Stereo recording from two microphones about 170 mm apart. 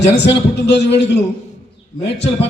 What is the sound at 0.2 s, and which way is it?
A man's voice, 80° left.